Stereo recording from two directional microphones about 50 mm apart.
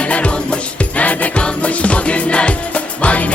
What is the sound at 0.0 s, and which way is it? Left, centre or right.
Music, left.